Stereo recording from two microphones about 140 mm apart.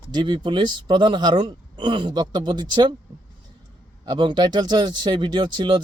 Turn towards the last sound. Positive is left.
turn(degrees=-30)  # may be behind; listen again after turning